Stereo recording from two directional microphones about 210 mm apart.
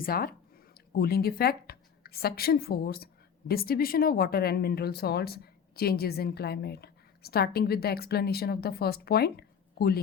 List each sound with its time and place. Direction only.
0.0 s speech: 45° left (ahead or behind)